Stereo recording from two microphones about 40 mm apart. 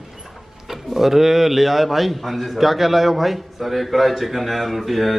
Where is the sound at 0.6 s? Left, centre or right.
Centre.